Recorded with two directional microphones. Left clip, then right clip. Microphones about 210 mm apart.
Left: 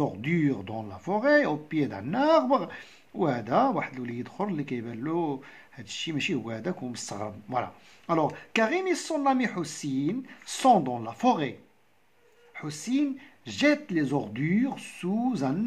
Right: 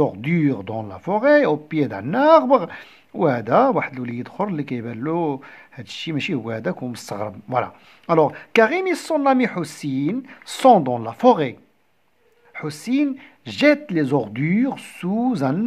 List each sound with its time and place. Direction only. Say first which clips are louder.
0.0 s speech: right 7 dB; 30° right (ahead or behind)
12.5 s speech: right 7 dB; 35° right (ahead or behind)